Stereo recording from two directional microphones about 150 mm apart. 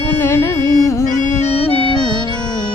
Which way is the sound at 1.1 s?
45° left (ahead or behind).